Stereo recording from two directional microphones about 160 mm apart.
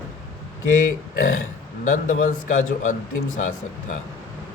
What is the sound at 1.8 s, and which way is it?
A man's voice, 50° left (ahead or behind).